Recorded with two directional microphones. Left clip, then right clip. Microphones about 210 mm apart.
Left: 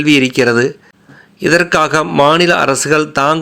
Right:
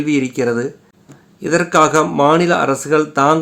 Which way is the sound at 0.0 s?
20° left (ahead or behind).